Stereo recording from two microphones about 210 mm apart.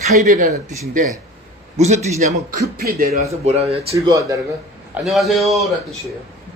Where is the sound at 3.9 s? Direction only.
15° right (ahead or behind).